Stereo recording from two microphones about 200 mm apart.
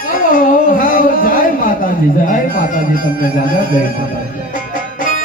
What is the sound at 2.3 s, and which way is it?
Speech, 40° left (ahead or behind).